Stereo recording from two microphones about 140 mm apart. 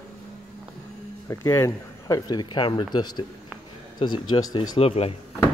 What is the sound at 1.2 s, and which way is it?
Speech, 20° left (ahead or behind).